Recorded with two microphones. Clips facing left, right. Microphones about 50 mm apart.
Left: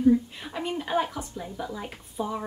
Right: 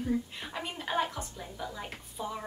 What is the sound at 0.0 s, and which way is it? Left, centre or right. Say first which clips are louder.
A woman's voice: left 11 dB; centre.